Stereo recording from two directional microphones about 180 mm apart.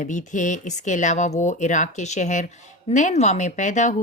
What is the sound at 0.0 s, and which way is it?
Speech, 45° left (ahead or behind).